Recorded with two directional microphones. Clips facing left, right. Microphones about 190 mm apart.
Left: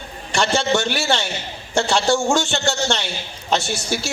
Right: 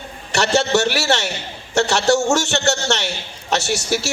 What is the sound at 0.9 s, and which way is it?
A man's voice, 70° right (ahead or behind).